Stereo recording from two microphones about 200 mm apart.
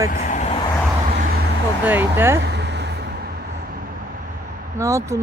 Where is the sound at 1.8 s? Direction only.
10° right (ahead or behind).